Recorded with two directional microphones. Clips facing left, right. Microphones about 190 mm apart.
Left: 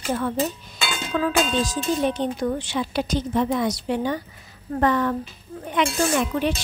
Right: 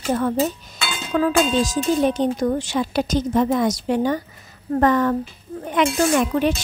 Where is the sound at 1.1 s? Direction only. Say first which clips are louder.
Right 4 dB; 45° right (ahead or behind).